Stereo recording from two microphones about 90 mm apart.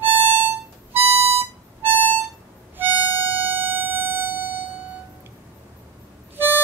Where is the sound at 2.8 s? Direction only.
20° right (ahead or behind).